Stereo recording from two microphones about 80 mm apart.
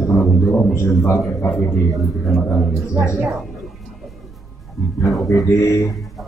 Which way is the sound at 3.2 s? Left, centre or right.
Centre.